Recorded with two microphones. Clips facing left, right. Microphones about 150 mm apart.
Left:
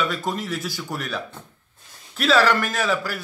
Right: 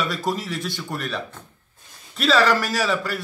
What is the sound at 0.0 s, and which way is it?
Speech, centre (ahead or behind).